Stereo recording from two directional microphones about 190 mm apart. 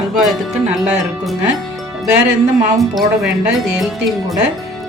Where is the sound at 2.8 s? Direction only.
Centre (ahead or behind).